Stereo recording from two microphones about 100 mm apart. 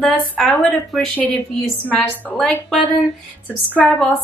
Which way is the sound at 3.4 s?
10° left (ahead or behind).